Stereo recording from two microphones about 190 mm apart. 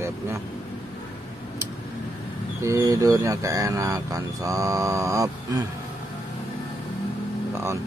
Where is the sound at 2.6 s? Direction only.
15° right (ahead or behind).